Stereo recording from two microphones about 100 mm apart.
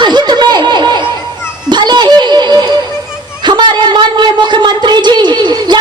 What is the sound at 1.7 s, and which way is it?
Music, 45° right (ahead or behind).